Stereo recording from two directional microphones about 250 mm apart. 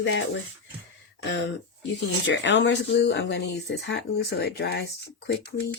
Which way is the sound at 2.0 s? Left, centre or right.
Left.